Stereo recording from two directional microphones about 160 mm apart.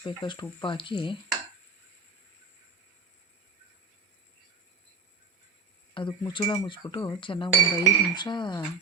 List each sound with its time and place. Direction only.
0.0 s speech: 30° left (ahead or behind)
5.9 s speech: 30° left (ahead or behind)